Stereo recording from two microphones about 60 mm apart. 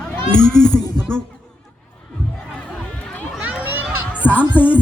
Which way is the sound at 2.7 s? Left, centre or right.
Left.